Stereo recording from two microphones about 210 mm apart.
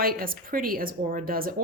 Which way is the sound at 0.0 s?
45° right (ahead or behind).